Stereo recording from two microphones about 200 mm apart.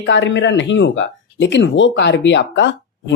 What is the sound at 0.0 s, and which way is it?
Speech, 65° left (ahead or behind).